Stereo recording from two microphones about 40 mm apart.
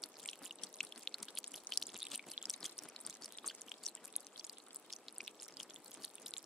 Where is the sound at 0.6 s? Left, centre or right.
Centre.